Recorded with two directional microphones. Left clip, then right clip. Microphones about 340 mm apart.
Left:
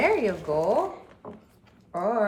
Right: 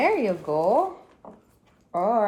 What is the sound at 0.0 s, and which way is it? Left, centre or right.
Speech, centre.